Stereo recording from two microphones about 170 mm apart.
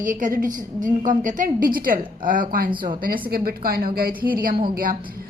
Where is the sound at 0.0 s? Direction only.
50° right (ahead or behind).